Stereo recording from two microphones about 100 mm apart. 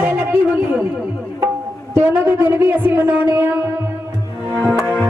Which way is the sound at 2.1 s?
20° right (ahead or behind).